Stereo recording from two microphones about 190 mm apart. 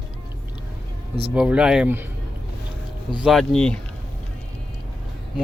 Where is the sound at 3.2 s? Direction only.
Centre (ahead or behind).